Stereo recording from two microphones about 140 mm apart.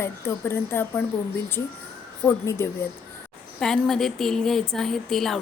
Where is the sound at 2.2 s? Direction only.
15° left (ahead or behind).